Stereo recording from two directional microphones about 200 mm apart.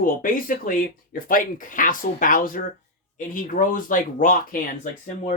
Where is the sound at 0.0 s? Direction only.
45° left (ahead or behind).